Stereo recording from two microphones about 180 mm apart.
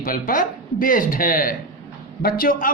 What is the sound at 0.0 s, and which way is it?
Speech, 50° left (ahead or behind).